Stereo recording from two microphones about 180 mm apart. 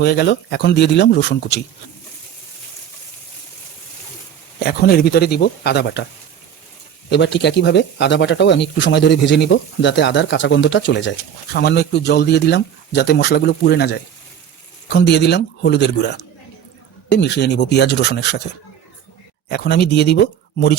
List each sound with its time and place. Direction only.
0.0 s speech: 65° left (ahead or behind)
4.6 s speech: 60° left (ahead or behind)
7.1 s speech: 75° left (ahead or behind)
11.5 s speech: 65° left (ahead or behind)
19.5 s speech: 65° left (ahead or behind)